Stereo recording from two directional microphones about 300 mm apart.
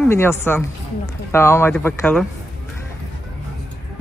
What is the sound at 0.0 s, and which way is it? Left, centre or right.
Speech, centre.